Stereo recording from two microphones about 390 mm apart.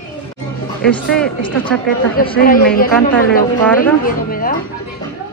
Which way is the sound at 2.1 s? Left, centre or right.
Left.